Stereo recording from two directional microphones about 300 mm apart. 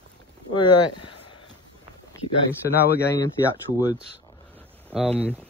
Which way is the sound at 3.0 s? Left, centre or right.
Centre.